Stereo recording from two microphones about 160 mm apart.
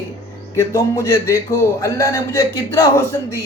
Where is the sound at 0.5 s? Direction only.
20° left (ahead or behind).